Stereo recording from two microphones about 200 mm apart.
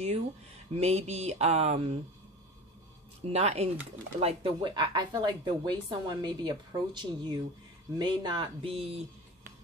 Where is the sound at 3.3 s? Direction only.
30° right (ahead or behind).